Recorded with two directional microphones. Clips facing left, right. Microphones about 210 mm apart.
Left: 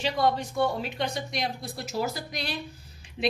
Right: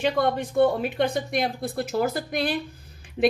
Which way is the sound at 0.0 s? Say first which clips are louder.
Right 3 dB; 55° right (ahead or behind).